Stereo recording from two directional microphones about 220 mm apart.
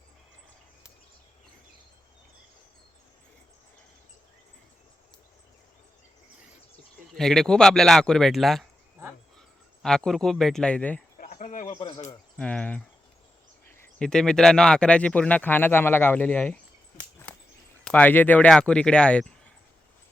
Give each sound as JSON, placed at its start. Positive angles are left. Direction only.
{"t": 7.1, "sound": "speech", "side_deg": 0}
{"t": 9.8, "sound": "speech", "side_deg": 0}
{"t": 11.2, "sound": "a sound", "side_deg": 35}
{"t": 11.7, "sound": "a sound", "side_deg": 20}
{"t": 12.0, "sound": "cricket", "side_deg": 5}
{"t": 14.0, "sound": "speech", "side_deg": 5}
{"t": 17.8, "sound": "speech", "side_deg": 5}